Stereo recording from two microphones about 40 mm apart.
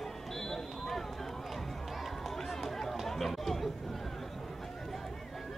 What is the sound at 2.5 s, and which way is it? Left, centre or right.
Run, centre.